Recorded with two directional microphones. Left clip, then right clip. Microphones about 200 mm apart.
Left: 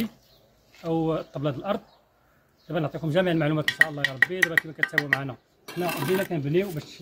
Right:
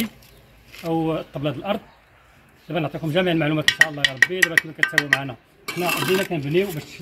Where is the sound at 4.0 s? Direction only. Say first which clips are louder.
Right 5 dB; 20° left (ahead or behind).